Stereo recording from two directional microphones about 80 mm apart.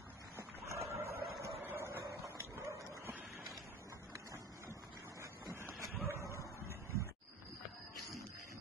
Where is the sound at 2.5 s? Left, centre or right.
Right.